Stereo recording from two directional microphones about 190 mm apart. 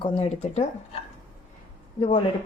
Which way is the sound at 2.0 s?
30° left (ahead or behind).